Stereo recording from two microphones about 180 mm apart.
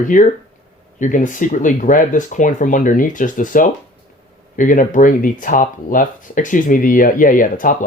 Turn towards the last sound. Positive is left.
turn(degrees=50)  # may be behind; listen again after turning